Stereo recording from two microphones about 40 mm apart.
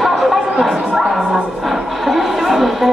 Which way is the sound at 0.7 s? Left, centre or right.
Centre.